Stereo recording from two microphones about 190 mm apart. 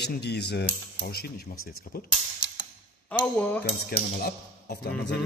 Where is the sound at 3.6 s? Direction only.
55° left (ahead or behind).